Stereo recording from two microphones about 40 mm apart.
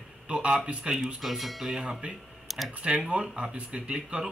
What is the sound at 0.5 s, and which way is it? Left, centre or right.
Speech, right.